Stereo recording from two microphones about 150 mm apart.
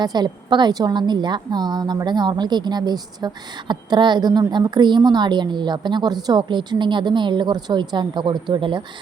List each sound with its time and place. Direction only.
0.0 s a woman's voice: 30° right (ahead or behind)